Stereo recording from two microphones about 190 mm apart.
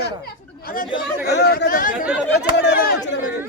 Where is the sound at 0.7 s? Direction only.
55° left (ahead or behind).